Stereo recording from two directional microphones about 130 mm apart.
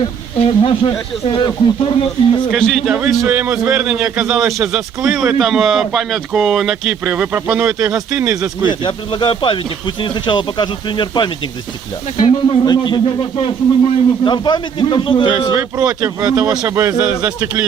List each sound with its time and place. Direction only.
0.0 s a man's voice: 45° left (ahead or behind)
2.5 s speech: 5° left (ahead or behind)
3.2 s a man's voice: 10° right (ahead or behind)
8.8 s a man's voice: 40° left (ahead or behind)
12.5 s a man's voice: 35° left (ahead or behind)
15.8 s a man's voice: 10° right (ahead or behind)
16.3 s a man's voice: 30° right (ahead or behind)
17.0 s a man's voice: 10° right (ahead or behind)